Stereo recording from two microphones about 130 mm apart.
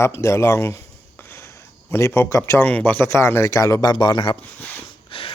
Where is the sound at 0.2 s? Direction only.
20° left (ahead or behind).